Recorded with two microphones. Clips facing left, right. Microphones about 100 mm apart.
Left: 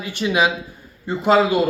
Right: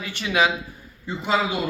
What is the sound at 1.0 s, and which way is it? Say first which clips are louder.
Speech: left 7 dB; 40° left (ahead or behind).